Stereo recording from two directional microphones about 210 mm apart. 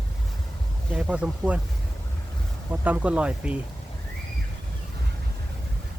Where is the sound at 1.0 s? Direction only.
5° right (ahead or behind).